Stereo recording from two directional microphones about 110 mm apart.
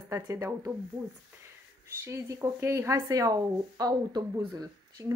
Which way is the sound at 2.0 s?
25° right (ahead or behind).